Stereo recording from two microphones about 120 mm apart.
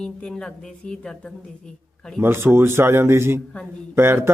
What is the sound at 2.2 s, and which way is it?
Speech, 20° right (ahead or behind).